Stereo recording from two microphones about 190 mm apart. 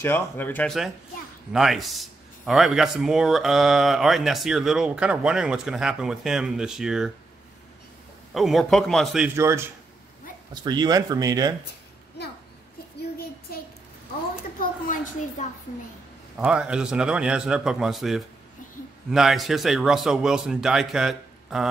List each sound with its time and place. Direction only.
0.0 s speech: 10° left (ahead or behind)
8.3 s speech: centre (ahead or behind)
9.4 s speech: 15° right (ahead or behind)
14.6 s a sound: 45° left (ahead or behind)
16.3 s speech: 5° right (ahead or behind)